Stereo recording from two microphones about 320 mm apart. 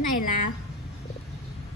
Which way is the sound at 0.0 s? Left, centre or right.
Left.